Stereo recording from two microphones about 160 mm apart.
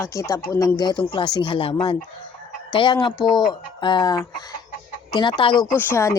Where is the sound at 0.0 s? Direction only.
20° left (ahead or behind).